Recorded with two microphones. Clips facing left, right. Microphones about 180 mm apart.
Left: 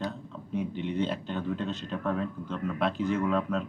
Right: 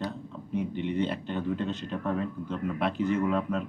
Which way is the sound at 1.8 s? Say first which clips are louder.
Even; 15° right (ahead or behind).